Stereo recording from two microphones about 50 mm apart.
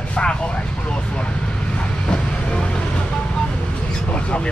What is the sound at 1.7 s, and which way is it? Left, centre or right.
Vehicle, centre.